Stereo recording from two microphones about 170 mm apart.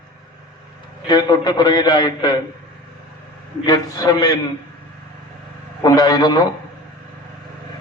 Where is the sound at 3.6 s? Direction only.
20° left (ahead or behind).